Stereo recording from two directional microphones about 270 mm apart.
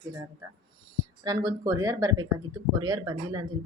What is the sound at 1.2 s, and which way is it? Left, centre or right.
Speech, centre.